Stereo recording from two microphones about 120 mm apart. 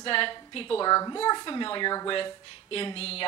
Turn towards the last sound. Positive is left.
turn(degrees=55)  # may be behind; listen again after turning